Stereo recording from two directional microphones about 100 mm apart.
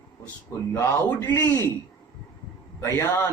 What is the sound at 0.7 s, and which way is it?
Speech, 30° left (ahead or behind).